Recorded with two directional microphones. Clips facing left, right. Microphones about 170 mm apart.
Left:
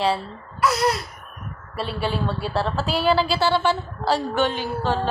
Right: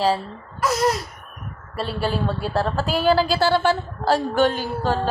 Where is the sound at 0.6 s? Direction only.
45° right (ahead or behind).